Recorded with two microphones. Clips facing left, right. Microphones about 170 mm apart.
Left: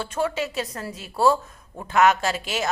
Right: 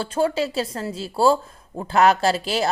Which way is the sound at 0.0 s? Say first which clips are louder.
Right 4 dB; 30° right (ahead or behind).